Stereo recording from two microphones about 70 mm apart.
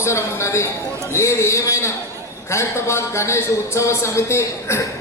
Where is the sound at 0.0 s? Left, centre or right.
Left.